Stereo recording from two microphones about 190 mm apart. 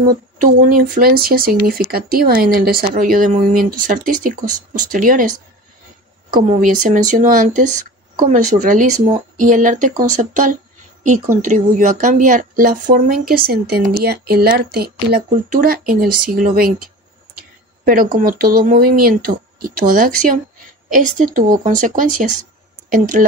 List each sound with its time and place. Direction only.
0.4 s speech: 45° right (ahead or behind)
6.3 s speech: 45° right (ahead or behind)